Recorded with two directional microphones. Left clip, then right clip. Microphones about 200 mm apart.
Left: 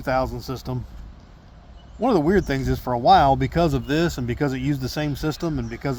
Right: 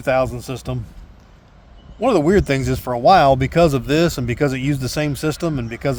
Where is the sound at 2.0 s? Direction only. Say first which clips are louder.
Right 4 dB; 40° right (ahead or behind).